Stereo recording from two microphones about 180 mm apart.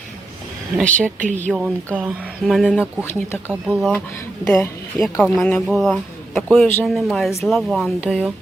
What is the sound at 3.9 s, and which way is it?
Speech, 10° left (ahead or behind).